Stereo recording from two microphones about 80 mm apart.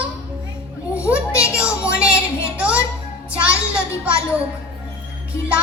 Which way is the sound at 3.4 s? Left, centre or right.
Centre.